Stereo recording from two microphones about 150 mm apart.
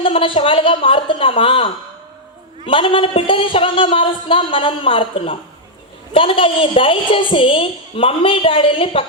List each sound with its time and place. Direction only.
0.0 s a woman's voice: 35° left (ahead or behind)